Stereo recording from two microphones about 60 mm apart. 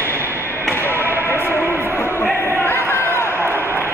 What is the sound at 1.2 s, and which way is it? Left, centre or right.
Music, left.